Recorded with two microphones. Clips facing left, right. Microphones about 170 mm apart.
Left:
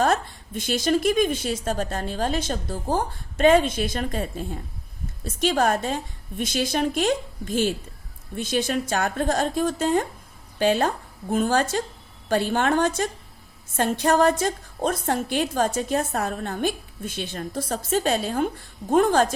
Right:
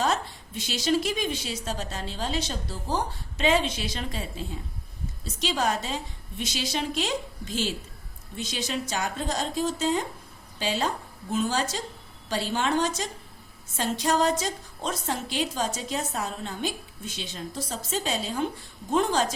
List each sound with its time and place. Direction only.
0.0 s a woman's voice: 50° left (ahead or behind)